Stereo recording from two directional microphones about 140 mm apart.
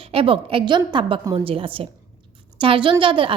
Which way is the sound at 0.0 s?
40° right (ahead or behind).